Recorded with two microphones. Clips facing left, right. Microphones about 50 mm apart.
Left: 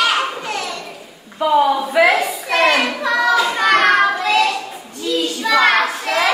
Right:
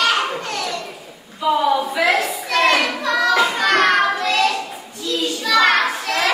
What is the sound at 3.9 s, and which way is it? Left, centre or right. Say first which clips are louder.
Child singing: left 3 dB; centre.